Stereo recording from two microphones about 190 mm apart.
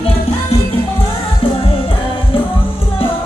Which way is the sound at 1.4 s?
30° left (ahead or behind).